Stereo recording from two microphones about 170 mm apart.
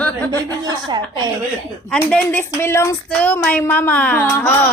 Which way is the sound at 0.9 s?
25° right (ahead or behind).